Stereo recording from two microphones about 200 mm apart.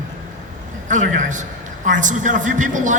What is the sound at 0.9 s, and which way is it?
A man's voice, 40° right (ahead or behind).